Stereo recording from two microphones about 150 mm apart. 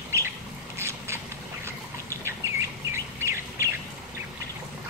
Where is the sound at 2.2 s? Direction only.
20° right (ahead or behind).